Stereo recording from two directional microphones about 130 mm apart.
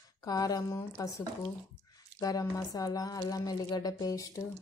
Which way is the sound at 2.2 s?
25° left (ahead or behind).